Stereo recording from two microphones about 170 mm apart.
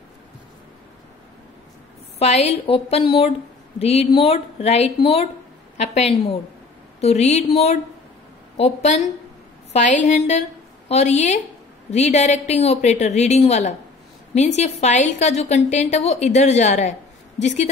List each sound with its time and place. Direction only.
2.1 s a woman's voice: 40° left (ahead or behind)